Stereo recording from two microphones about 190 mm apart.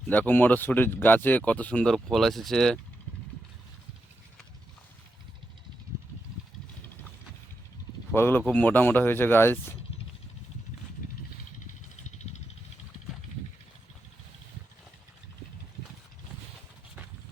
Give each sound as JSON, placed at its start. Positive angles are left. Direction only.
{"t": 0.1, "sound": "speech", "side_deg": 10}
{"t": 8.1, "sound": "speech", "side_deg": 10}
{"t": 11.6, "sound": "a sound", "side_deg": 40}